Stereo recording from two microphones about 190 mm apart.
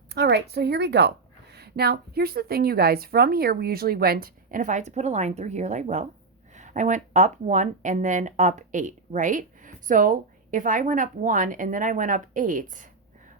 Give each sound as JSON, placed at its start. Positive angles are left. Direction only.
{"t": 0.1, "sound": "a woman's voice", "side_deg": -60}